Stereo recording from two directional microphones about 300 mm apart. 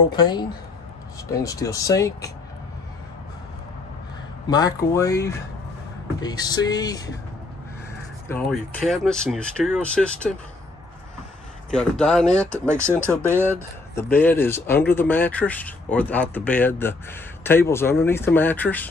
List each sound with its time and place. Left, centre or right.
0.1 s speech: centre
4.5 s speech: centre
8.3 s speech: centre
11.7 s speech: centre
12.3 s speech: left
13.2 s speech: centre
14.0 s speech: centre